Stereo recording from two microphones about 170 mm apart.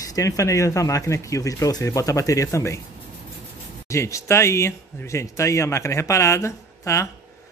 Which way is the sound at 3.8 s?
15° left (ahead or behind).